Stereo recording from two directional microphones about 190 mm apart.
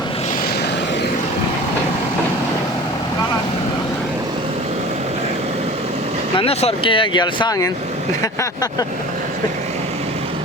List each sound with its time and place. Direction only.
6.3 s speech: 30° left (ahead or behind)